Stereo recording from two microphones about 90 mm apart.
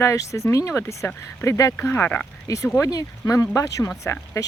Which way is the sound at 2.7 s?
40° left (ahead or behind).